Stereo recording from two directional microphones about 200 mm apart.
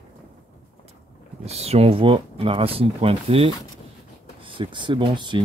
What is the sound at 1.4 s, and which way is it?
Speech, 30° right (ahead or behind).